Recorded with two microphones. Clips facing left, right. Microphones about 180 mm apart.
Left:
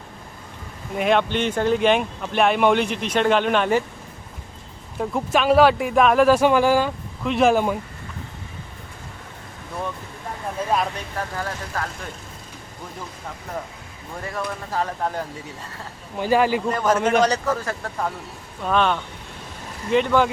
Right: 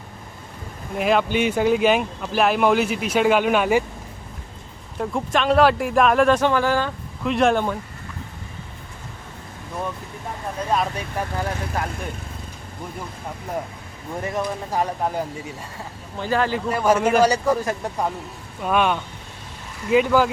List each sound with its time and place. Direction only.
0.9 s speech: centre (ahead or behind)
4.9 s speech: 5° left (ahead or behind)
10.7 s speech: centre (ahead or behind)
11.4 s speech: 15° right (ahead or behind)
14.2 s speech: 20° right (ahead or behind)
16.1 s speech: 10° left (ahead or behind)
16.6 s speech: 10° right (ahead or behind)